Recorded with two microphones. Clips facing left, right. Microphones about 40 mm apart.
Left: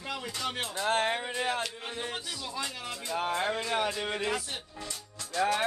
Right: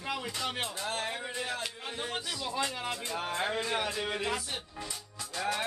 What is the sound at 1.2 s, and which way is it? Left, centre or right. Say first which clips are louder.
Speech: left 4 dB; left.